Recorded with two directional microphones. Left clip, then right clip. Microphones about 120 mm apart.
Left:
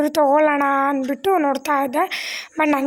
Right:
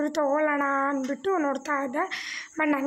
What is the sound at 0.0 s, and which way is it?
A woman's voice, 40° left (ahead or behind).